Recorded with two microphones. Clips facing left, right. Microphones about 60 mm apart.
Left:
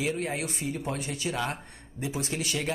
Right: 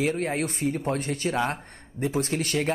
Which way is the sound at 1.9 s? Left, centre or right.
Right.